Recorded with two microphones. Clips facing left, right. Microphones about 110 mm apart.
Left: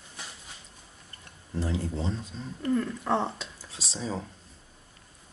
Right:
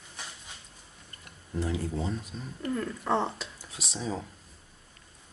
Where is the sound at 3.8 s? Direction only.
30° left (ahead or behind).